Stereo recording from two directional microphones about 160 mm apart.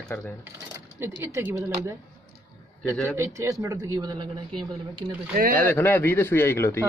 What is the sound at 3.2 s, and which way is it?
A woman's voice, 20° right (ahead or behind).